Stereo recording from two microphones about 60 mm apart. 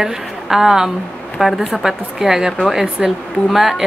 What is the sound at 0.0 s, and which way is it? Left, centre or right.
Speech, centre.